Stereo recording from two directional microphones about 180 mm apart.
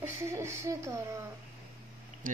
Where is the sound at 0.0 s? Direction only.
15° right (ahead or behind).